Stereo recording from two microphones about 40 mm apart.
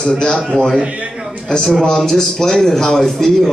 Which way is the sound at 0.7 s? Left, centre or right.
Right.